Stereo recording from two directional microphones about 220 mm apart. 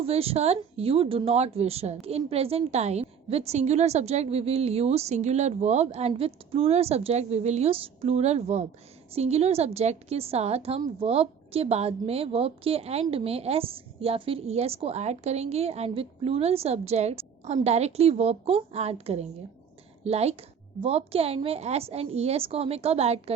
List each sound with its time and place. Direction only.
0.0 s a woman's voice: 25° right (ahead or behind)